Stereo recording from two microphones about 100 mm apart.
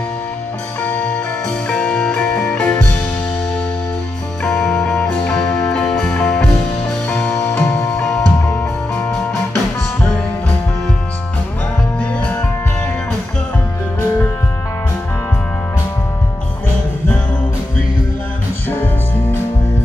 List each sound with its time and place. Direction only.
0.8 s music: 10° left (ahead or behind)
4.5 s music: 5° left (ahead or behind)
7.1 s music: 20° left (ahead or behind)
8.0 s music: 10° left (ahead or behind)